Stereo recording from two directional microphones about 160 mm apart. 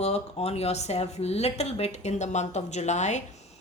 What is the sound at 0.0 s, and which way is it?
Speech, 40° left (ahead or behind).